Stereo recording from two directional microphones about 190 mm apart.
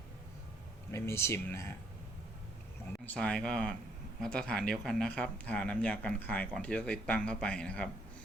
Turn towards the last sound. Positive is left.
turn(degrees=5)  # may be behind; listen again after turning